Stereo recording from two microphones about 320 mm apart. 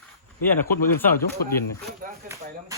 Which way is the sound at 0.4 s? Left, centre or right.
Centre.